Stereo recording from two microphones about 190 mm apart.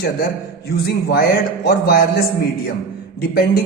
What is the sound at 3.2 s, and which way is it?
Speech, 55° left (ahead or behind).